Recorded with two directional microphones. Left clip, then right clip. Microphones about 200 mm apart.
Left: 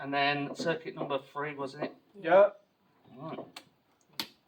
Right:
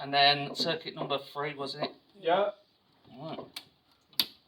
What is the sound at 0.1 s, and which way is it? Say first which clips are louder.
Speech: right 5 dB; 25° left (ahead or behind).